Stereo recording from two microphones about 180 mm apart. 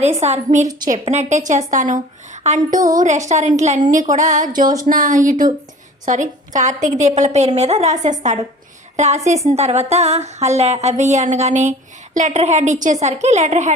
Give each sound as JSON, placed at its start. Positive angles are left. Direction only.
{"t": 0.0, "sound": "a woman's voice", "side_deg": -40}
{"t": 4.6, "sound": "speech", "side_deg": -20}
{"t": 4.9, "sound": "a woman's voice", "side_deg": -50}